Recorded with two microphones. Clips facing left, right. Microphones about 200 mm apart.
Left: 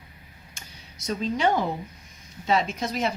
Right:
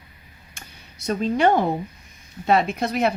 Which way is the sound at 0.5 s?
60° right (ahead or behind).